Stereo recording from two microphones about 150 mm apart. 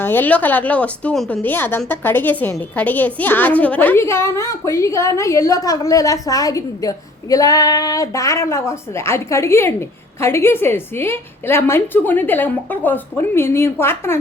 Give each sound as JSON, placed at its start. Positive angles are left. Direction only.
{"t": 0.0, "sound": "a woman's voice", "side_deg": 15}